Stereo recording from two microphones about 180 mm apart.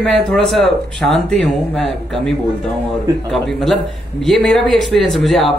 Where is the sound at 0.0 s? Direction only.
Centre (ahead or behind).